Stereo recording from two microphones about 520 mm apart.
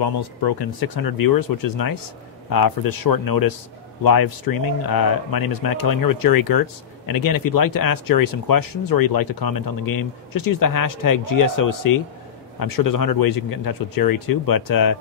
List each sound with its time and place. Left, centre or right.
0.0 s speech: left